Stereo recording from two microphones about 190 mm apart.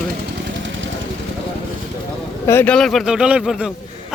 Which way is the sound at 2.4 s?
10° left (ahead or behind).